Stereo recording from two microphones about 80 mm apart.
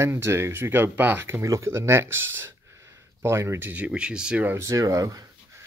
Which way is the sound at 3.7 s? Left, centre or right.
Centre.